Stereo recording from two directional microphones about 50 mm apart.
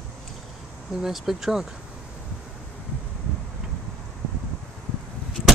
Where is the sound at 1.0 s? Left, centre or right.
Centre.